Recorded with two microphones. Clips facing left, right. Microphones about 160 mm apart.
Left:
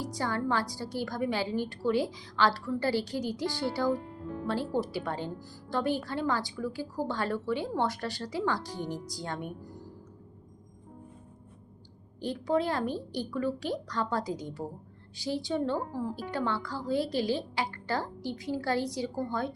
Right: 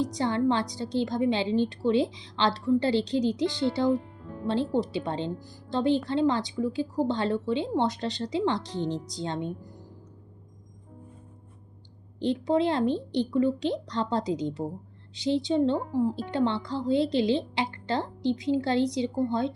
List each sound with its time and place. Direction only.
0.0 s a woman's voice: 20° right (ahead or behind)
12.2 s a woman's voice: 25° right (ahead or behind)